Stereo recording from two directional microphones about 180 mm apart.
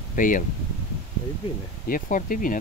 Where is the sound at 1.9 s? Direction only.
50° left (ahead or behind).